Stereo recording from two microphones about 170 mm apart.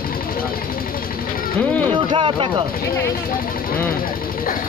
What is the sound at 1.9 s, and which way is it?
Speech, 30° right (ahead or behind).